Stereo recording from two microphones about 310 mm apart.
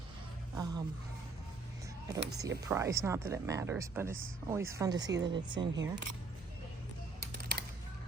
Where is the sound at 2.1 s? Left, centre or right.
Centre.